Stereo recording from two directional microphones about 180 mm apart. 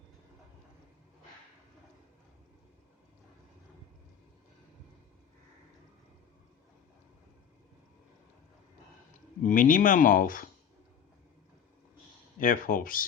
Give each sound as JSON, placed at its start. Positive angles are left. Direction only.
{"t": 9.1, "sound": "speech", "side_deg": 45}
{"t": 12.4, "sound": "speech", "side_deg": 50}